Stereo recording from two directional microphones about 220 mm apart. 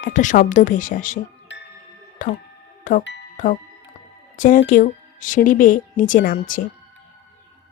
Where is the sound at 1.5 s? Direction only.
55° left (ahead or behind).